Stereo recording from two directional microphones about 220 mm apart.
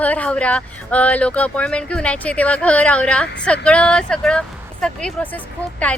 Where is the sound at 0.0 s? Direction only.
5° left (ahead or behind).